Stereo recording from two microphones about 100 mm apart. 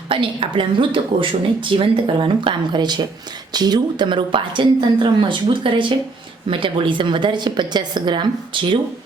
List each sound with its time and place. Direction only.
0.1 s a woman's voice: 60° right (ahead or behind)